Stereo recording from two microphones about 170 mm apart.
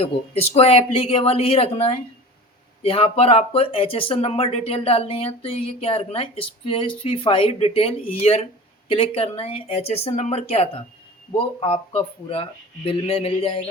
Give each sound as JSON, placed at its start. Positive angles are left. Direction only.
{"t": 0.0, "sound": "speech", "side_deg": 35}